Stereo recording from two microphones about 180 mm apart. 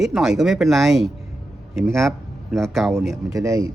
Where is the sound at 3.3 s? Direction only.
20° right (ahead or behind).